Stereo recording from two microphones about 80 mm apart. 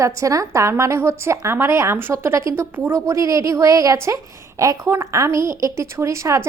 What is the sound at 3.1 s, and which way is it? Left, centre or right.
A woman's voice, right.